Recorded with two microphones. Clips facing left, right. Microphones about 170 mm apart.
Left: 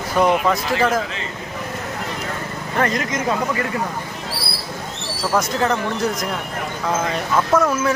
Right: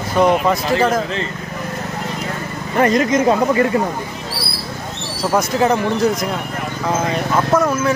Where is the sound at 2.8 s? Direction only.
25° right (ahead or behind).